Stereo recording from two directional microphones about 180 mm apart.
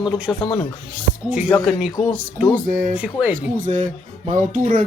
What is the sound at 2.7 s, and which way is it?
Speech, 45° right (ahead or behind).